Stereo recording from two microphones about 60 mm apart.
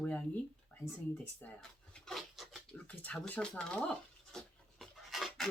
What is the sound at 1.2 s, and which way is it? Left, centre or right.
Speech, left.